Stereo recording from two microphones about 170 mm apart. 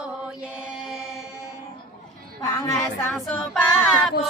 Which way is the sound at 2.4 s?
15° left (ahead or behind).